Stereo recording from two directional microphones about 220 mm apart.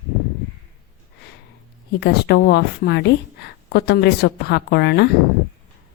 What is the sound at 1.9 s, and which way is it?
A woman's voice, 50° left (ahead or behind).